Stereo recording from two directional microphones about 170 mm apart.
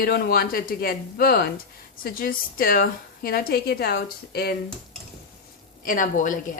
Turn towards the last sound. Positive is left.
turn(degrees=50)  # may be behind; listen again after turning